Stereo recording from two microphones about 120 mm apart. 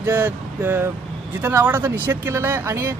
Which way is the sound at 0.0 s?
15° right (ahead or behind).